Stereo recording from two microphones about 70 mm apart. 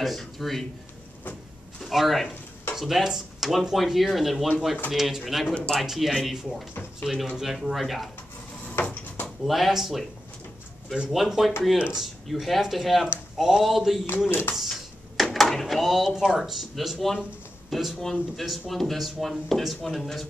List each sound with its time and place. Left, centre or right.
0.0 s speech: centre
1.8 s speech: centre
6.7 s speech: left
7.1 s speech: centre
8.8 s a sound: left
9.4 s speech: centre
11.1 s speech: centre
14.5 s a sound: centre
16.3 s speech: centre